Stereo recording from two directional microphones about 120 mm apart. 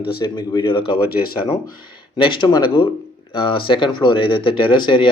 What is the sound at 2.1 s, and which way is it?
Speech, 40° left (ahead or behind).